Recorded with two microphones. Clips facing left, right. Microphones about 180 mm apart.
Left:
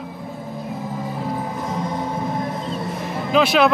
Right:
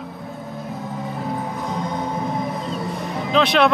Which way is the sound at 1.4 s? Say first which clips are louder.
Left 1 dB; centre (ahead or behind).